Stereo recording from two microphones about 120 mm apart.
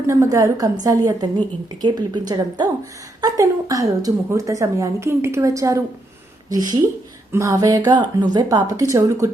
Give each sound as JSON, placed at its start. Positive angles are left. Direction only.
{"t": 0.1, "sound": "a woman's voice", "side_deg": -25}